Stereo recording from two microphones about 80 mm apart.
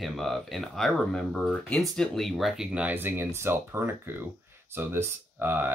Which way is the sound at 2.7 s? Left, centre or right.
Right.